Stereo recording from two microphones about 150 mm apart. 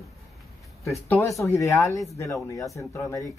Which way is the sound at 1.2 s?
20° left (ahead or behind).